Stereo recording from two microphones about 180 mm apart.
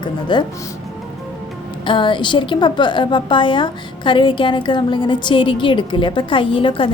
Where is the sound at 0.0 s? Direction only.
25° left (ahead or behind).